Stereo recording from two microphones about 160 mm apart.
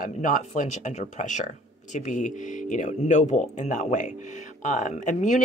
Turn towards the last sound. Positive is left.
turn(degrees=50)  # may be behind; listen again after turning